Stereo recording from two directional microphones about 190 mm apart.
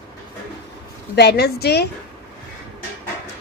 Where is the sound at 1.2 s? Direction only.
60° left (ahead or behind).